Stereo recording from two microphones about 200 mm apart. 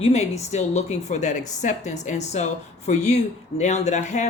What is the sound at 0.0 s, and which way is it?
Speech, 35° left (ahead or behind).